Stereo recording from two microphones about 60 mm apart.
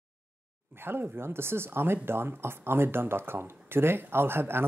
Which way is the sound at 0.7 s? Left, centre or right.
Right.